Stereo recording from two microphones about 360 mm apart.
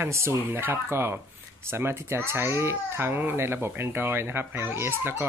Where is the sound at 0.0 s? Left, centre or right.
Centre.